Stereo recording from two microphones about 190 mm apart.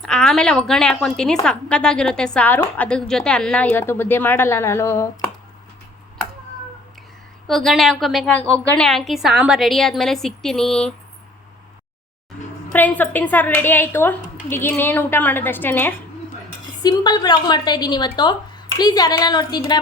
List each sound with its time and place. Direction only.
0.0 s a woman's voice: 5° left (ahead or behind)
7.4 s a woman's voice: centre (ahead or behind)
12.7 s a woman's voice: 10° left (ahead or behind)
16.8 s a woman's voice: 20° left (ahead or behind)